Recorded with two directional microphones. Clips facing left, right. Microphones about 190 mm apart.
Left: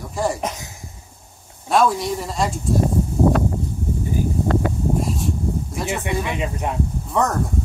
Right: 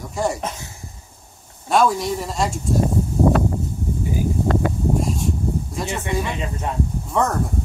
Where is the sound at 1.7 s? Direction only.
Centre (ahead or behind).